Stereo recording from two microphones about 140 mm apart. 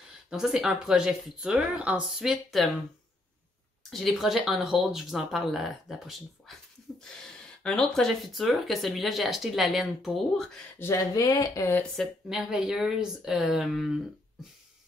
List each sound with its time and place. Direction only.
0.3 s speech: 5° right (ahead or behind)
3.9 s speech: centre (ahead or behind)
7.6 s speech: 5° left (ahead or behind)
10.8 s speech: 20° left (ahead or behind)
12.0 s speech: 5° right (ahead or behind)